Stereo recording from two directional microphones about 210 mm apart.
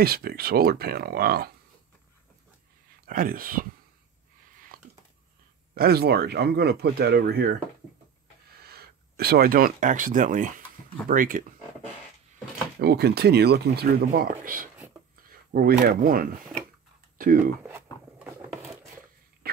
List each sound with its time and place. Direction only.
0.0 s speech: 45° right (ahead or behind)
3.1 s speech: 40° right (ahead or behind)
4.7 s a sound: 45° right (ahead or behind)
5.8 s speech: 50° right (ahead or behind)
8.5 s speech: 50° right (ahead or behind)
12.8 s speech: 50° right (ahead or behind)
17.6 s a sound: 10° right (ahead or behind)
19.4 s wheeze: 45° right (ahead or behind)